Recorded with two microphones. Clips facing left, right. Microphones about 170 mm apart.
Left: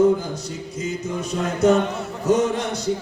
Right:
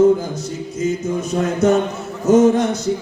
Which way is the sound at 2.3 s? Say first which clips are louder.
Right 7 dB; 45° right (ahead or behind).